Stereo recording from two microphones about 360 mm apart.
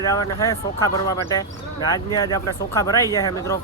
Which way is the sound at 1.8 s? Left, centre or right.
Centre.